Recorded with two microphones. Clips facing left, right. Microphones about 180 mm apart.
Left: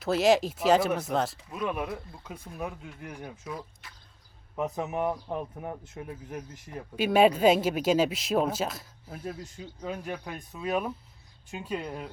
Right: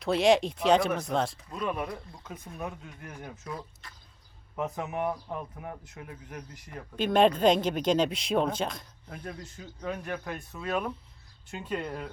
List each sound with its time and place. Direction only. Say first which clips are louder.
0.0 s speech: even; centre (ahead or behind)
2.8 s speech: left 3 dB; 15° left (ahead or behind)
3.2 s speech: right 2 dB; 5° left (ahead or behind)
4.5 s speech: left 2 dB; 20° left (ahead or behind)
5.6 s speech: left 4 dB; 25° left (ahead or behind)
6.9 s speech: left 1 dB; 10° left (ahead or behind)